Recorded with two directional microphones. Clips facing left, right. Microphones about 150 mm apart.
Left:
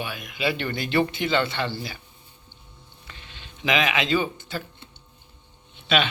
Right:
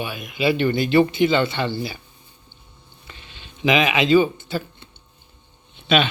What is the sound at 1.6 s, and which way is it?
Speech, 25° right (ahead or behind).